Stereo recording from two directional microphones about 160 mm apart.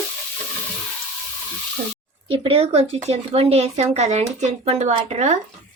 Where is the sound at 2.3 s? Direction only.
35° right (ahead or behind).